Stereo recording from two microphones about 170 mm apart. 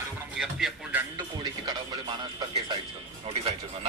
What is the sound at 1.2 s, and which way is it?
Speech, 25° right (ahead or behind).